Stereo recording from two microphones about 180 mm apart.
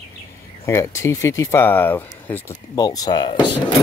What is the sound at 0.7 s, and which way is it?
Speech, 15° left (ahead or behind).